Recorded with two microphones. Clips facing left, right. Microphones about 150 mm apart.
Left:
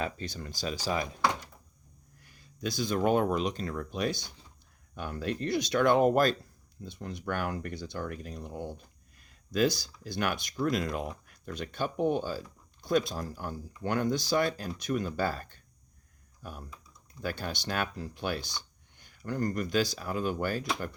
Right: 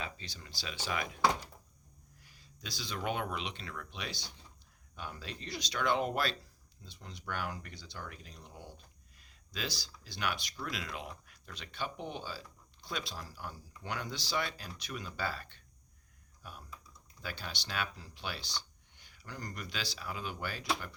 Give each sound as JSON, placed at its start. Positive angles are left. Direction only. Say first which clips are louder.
{"t": 0.0, "sound": "speech", "louder": "left 9 dB", "side_deg": 50}
{"t": 2.2, "sound": "speech", "louder": "left 14 dB", "side_deg": 50}